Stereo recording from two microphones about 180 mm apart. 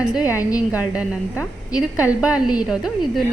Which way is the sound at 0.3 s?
15° left (ahead or behind).